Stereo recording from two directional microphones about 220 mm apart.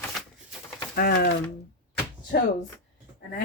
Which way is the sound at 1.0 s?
45° left (ahead or behind).